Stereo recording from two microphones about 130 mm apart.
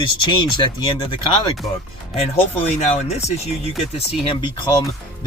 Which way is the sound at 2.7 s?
60° left (ahead or behind).